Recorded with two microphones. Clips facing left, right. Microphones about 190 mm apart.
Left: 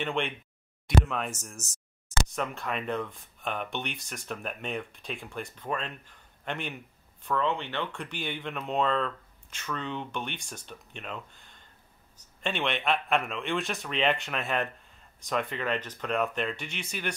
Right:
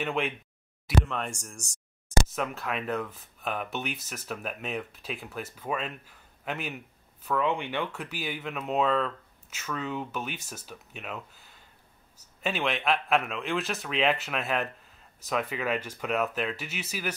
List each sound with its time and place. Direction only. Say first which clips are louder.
0.0 s a man's voice: right 1 dB; 5° right (ahead or behind)